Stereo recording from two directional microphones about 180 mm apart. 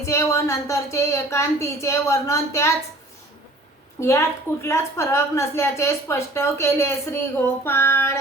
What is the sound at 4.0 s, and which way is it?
A woman's voice, 15° left (ahead or behind).